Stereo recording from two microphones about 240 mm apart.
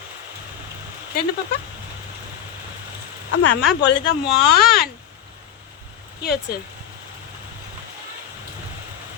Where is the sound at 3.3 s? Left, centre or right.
Left.